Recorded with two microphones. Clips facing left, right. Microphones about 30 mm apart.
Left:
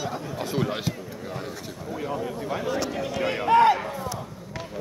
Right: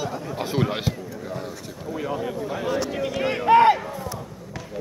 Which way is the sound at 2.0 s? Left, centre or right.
Right.